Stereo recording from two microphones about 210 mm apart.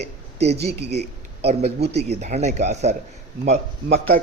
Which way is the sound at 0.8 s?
50° right (ahead or behind).